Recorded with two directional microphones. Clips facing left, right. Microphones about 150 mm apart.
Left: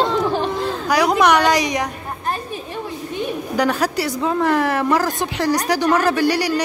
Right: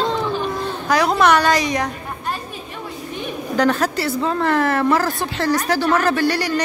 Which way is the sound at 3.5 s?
10° left (ahead or behind).